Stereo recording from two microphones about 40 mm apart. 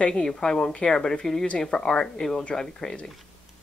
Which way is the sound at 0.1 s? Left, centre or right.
Centre.